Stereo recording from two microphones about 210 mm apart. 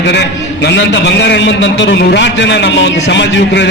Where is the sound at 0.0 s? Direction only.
55° left (ahead or behind).